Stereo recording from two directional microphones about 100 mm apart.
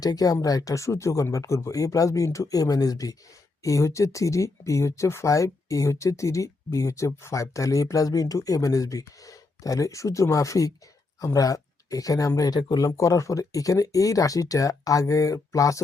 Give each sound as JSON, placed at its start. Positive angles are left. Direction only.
{"t": 0.0, "sound": "speech", "side_deg": 40}
{"t": 12.9, "sound": "speech", "side_deg": 30}